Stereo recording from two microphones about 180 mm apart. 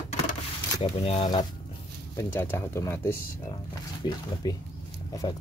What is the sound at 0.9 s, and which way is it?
Speech, 30° left (ahead or behind).